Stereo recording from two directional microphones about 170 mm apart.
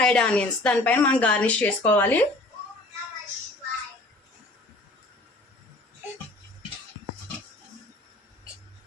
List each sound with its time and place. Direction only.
0.0 s a woman's voice: 5° left (ahead or behind)